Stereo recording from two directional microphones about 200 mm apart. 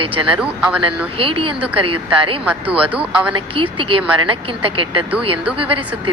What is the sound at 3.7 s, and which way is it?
Speech, 25° right (ahead or behind).